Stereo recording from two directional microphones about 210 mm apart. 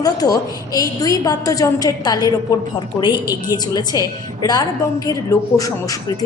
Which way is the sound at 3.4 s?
20° left (ahead or behind).